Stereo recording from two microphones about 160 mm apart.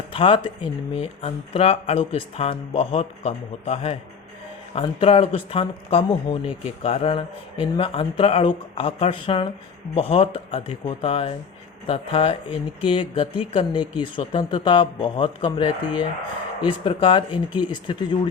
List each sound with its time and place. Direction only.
0.1 s speech: 35° left (ahead or behind)